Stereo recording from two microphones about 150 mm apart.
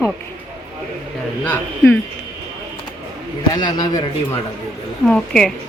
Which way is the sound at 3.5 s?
25° left (ahead or behind).